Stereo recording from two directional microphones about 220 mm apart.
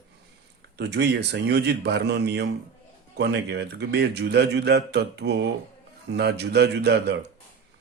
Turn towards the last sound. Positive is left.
turn(degrees=-50)  # may be behind; listen again after turning